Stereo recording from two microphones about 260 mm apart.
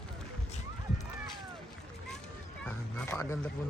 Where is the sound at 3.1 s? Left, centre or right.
Centre.